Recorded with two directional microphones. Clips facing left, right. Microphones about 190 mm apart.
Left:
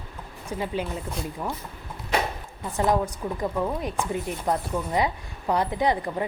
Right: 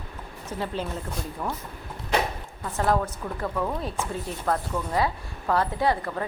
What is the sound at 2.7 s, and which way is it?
Speech, 15° left (ahead or behind).